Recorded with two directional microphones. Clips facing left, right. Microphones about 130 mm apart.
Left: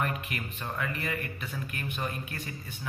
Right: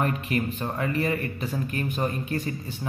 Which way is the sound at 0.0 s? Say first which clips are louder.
Right 7 dB; 35° right (ahead or behind).